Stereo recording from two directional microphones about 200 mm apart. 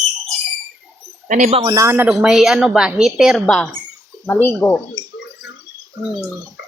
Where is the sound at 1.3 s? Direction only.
35° right (ahead or behind).